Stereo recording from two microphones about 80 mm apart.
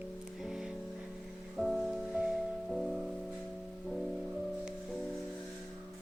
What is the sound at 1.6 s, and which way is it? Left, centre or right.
Music, centre.